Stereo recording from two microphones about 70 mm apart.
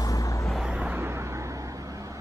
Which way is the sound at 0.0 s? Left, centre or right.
Left.